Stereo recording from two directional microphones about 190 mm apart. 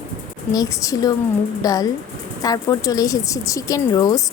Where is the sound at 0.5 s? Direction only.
15° left (ahead or behind).